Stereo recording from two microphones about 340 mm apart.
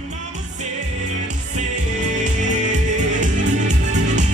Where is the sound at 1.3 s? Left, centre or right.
Right.